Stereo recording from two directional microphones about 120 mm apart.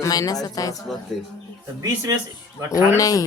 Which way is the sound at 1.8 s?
30° right (ahead or behind).